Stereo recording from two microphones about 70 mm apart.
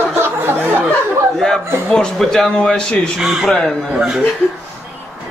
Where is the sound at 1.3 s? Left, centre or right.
Centre.